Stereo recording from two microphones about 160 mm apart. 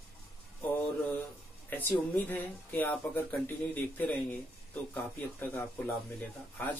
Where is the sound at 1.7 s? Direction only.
10° left (ahead or behind).